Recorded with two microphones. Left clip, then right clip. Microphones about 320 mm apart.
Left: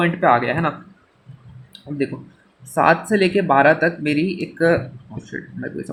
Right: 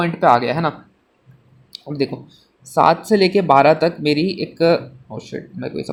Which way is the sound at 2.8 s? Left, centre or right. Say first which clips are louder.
Right 2 dB; centre.